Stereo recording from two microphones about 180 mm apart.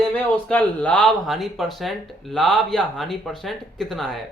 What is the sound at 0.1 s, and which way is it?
Speech, 5° left (ahead or behind).